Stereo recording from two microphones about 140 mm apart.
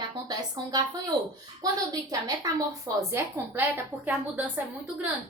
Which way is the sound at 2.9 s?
25° right (ahead or behind).